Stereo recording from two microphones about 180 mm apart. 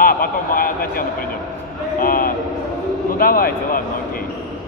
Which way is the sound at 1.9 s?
50° left (ahead or behind).